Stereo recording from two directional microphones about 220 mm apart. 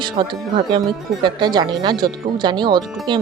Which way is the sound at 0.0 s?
20° right (ahead or behind).